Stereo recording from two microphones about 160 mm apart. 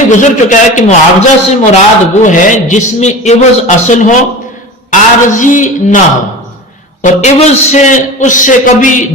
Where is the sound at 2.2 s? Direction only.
50° left (ahead or behind).